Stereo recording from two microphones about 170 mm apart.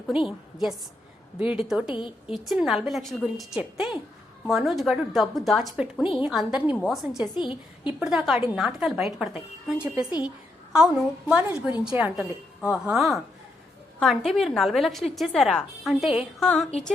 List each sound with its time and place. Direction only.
0.1 s a woman's voice: centre (ahead or behind)
7.3 s a woman's voice: 30° left (ahead or behind)
7.9 s a woman's voice: 5° right (ahead or behind)